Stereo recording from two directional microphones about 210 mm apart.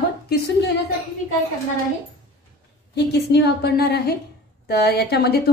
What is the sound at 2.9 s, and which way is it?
A woman's voice, 50° left (ahead or behind).